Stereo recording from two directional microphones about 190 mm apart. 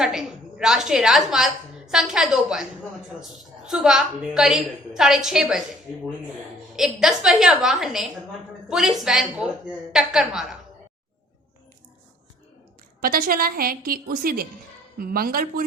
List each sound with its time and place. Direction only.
0.0 s a woman's voice: centre (ahead or behind)
6.7 s a woman's voice: 5° right (ahead or behind)
13.0 s a woman's voice: 50° right (ahead or behind)